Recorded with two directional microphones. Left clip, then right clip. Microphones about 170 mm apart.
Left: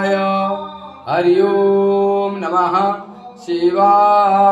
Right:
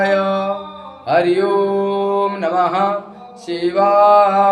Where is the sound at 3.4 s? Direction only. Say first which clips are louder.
Left 2 dB; 25° right (ahead or behind).